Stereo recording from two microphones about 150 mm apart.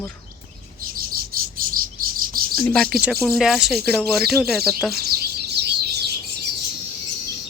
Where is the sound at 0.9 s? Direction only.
75° right (ahead or behind).